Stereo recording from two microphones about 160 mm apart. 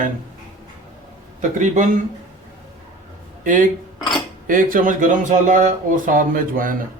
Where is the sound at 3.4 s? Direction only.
55° right (ahead or behind).